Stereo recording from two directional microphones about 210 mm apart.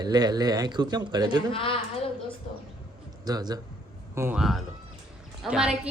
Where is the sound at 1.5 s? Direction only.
25° left (ahead or behind).